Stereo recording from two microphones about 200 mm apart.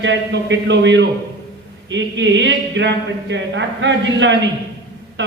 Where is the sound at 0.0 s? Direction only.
65° right (ahead or behind).